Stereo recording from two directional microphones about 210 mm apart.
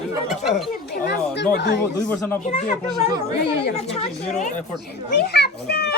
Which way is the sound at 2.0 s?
10° left (ahead or behind).